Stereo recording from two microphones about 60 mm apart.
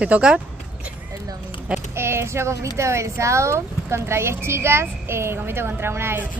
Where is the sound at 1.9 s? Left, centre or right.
Right.